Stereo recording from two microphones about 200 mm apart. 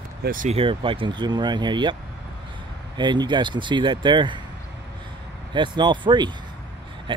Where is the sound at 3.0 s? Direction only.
20° right (ahead or behind).